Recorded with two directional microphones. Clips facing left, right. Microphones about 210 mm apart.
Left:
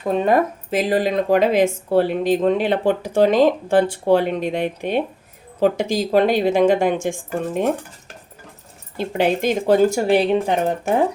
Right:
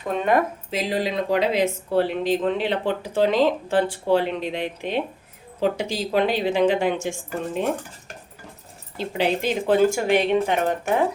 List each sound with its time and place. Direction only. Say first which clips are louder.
0.1 s speech: left 4 dB; 35° left (ahead or behind)
0.7 s speech: left 8 dB; 50° left (ahead or behind)
9.0 s speech: left 4 dB; 50° left (ahead or behind)